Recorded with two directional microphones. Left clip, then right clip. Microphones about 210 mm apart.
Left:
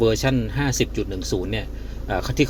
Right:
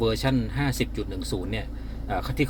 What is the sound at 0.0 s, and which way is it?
A man's voice, 20° left (ahead or behind).